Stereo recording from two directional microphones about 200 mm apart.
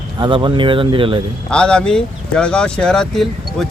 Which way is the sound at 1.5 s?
5° left (ahead or behind).